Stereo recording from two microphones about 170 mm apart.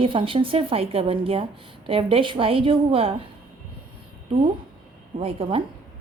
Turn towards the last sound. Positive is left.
turn(degrees=-30)  # may be behind; listen again after turning